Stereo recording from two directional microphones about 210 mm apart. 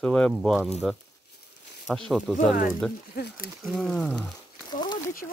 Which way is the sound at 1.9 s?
Centre (ahead or behind).